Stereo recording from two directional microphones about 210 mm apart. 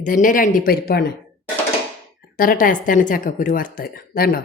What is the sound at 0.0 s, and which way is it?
Speech, 40° left (ahead or behind).